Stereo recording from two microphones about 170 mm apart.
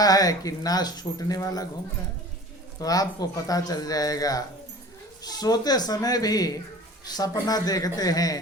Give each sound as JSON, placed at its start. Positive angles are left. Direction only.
{"t": 0.0, "sound": "speech", "side_deg": 20}
{"t": 2.7, "sound": "speech", "side_deg": 20}